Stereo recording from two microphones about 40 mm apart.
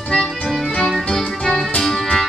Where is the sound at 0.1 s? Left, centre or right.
Centre.